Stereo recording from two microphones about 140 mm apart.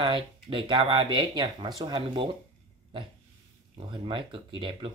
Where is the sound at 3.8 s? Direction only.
40° right (ahead or behind).